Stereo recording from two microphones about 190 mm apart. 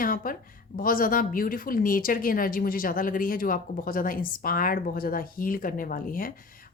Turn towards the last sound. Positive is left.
turn(degrees=50)  # may be behind; listen again after turning